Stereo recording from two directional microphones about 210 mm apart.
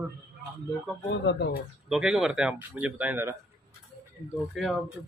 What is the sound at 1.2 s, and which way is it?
Speech, 55° left (ahead or behind).